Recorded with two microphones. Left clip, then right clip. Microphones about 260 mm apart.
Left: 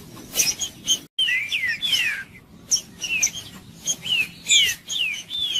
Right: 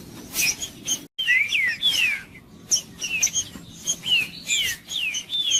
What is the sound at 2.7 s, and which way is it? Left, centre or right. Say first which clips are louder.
Bird: left 1 dB; centre.